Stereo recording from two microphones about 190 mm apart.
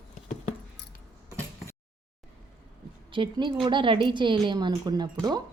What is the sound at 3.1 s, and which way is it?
A woman's voice, 25° right (ahead or behind).